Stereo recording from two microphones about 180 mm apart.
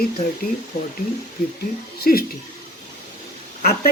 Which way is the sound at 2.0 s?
55° left (ahead or behind).